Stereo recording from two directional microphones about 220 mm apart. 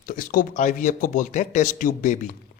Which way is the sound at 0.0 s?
40° left (ahead or behind).